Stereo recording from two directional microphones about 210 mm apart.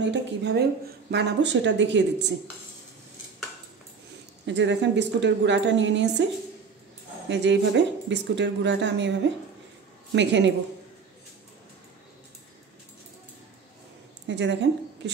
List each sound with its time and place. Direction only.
0.0 s speech: 55° right (ahead or behind)
4.5 s speech: 60° right (ahead or behind)
7.2 s speech: 55° right (ahead or behind)
10.1 s speech: 55° right (ahead or behind)
14.2 s a woman's voice: 55° right (ahead or behind)